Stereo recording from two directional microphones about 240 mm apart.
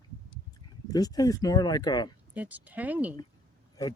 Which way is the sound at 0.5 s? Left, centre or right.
Centre.